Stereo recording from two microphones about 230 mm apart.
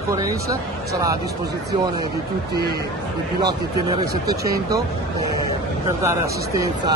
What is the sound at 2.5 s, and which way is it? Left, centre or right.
Speech, right.